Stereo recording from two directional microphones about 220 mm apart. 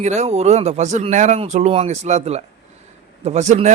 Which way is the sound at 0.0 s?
30° right (ahead or behind).